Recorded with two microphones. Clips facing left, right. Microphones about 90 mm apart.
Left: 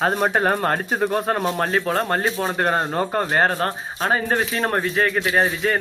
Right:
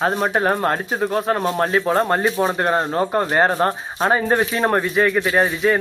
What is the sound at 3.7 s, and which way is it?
Speech, 20° right (ahead or behind).